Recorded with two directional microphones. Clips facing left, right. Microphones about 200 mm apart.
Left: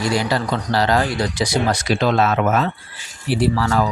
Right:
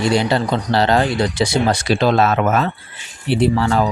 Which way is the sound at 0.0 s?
25° right (ahead or behind).